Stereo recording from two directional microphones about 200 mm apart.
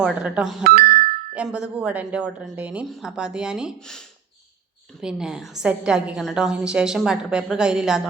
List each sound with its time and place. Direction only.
0.0 s a woman's voice: 5° right (ahead or behind)
0.6 s speech: 50° right (ahead or behind)
1.3 s a woman's voice: 5° right (ahead or behind)